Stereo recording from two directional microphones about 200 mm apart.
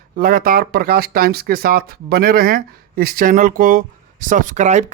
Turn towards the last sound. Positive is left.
turn(degrees=-35)  # may be behind; listen again after turning